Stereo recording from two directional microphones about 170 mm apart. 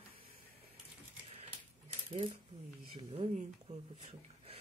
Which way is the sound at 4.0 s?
40° right (ahead or behind).